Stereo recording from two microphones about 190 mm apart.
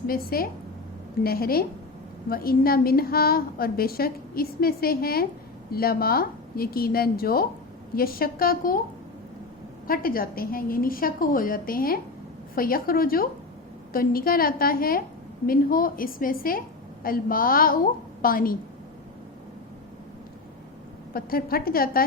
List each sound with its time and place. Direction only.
0.1 s a woman's voice: 50° left (ahead or behind)
9.8 s a woman's voice: 50° left (ahead or behind)
21.1 s a woman's voice: 50° left (ahead or behind)